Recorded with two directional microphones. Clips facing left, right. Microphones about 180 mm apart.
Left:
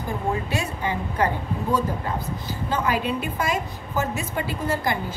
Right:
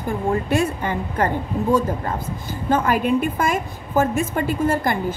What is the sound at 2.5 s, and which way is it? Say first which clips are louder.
A woman's voice: right 5 dB; 50° right (ahead or behind).